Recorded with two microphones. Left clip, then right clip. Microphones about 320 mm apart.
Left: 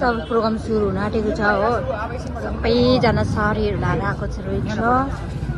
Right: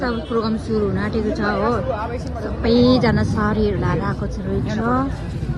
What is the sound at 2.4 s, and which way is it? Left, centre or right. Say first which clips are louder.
A woman's voice: right 1 dB; centre.